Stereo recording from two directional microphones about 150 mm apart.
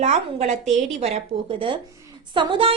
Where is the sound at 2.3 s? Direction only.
35° right (ahead or behind).